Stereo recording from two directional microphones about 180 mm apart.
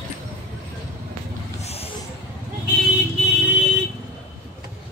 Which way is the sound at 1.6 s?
35° left (ahead or behind).